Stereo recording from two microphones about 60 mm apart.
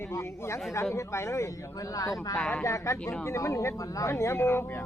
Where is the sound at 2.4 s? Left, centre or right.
Centre.